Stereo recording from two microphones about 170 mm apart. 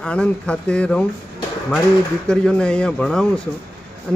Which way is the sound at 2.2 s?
5° left (ahead or behind).